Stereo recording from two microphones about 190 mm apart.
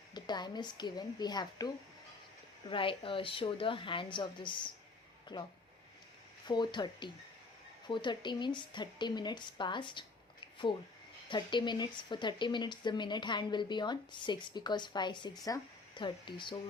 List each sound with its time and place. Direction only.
0.1 s speech: 20° left (ahead or behind)
6.5 s speech: 25° left (ahead or behind)